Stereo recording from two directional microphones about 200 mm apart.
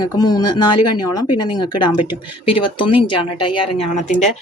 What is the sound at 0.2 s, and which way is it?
A woman's voice, 20° left (ahead or behind).